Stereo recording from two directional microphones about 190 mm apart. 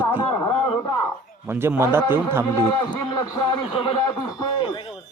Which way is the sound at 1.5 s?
10° right (ahead or behind).